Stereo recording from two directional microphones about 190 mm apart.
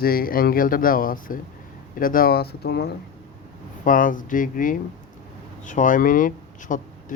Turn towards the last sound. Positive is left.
turn(degrees=40)  # may be behind; listen again after turning